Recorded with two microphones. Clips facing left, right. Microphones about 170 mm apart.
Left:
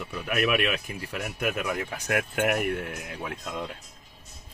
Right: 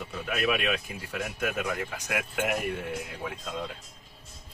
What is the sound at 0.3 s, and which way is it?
Speech, 65° left (ahead or behind).